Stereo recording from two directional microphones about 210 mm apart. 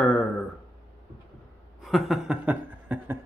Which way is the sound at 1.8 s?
Centre (ahead or behind).